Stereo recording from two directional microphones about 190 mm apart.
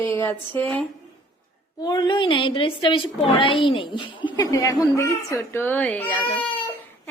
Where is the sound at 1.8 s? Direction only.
20° left (ahead or behind).